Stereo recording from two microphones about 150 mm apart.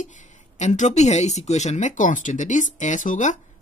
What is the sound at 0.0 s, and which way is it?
Speech, 55° left (ahead or behind).